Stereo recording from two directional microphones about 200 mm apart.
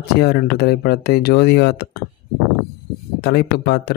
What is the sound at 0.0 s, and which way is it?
Speech, 55° left (ahead or behind).